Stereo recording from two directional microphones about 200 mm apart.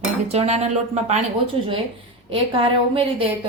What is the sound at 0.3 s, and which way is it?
Speech, 35° right (ahead or behind).